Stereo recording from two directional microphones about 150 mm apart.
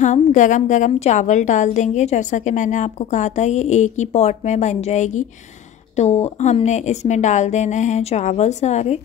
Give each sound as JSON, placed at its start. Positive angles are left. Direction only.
{"t": 0.0, "sound": "a woman's voice", "side_deg": 55}